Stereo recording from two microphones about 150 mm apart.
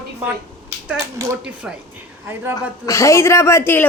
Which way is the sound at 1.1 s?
20° right (ahead or behind).